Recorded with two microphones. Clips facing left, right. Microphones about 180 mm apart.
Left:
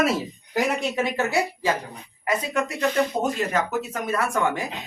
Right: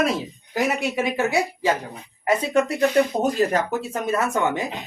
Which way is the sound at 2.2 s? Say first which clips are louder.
Right 5 dB; 30° right (ahead or behind).